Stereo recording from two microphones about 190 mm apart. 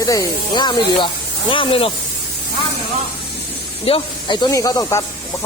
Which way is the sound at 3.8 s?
25° left (ahead or behind).